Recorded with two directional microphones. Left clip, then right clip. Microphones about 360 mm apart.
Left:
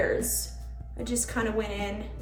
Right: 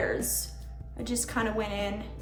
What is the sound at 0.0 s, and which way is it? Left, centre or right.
Speech, centre.